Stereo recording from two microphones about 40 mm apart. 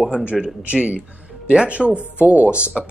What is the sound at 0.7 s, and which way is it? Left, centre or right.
Speech, right.